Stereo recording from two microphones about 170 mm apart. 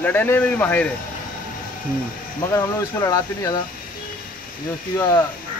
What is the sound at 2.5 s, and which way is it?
Speech, 15° left (ahead or behind).